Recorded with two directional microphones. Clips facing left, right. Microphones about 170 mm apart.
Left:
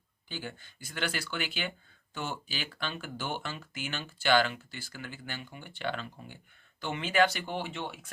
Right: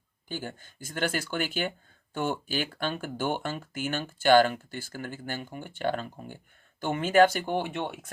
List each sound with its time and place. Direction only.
0.3 s speech: 45° right (ahead or behind)